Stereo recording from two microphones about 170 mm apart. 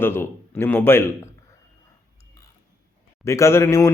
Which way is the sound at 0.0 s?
15° left (ahead or behind).